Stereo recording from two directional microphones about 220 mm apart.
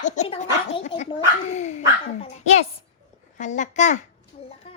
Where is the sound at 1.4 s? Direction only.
30° left (ahead or behind).